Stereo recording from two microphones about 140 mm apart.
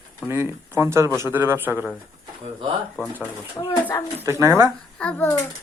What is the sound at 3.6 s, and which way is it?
Speech, 20° left (ahead or behind).